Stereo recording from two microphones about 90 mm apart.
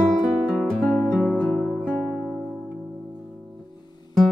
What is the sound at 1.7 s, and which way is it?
Music, 5° left (ahead or behind).